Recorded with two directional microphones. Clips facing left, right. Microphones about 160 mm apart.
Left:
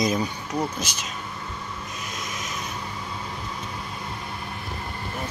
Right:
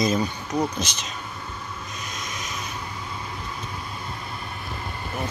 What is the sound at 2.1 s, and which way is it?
Vehicle, 5° left (ahead or behind).